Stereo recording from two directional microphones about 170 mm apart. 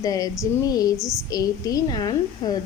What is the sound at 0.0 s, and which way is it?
Speech, 20° left (ahead or behind).